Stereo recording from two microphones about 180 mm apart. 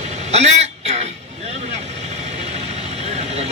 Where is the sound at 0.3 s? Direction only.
35° right (ahead or behind).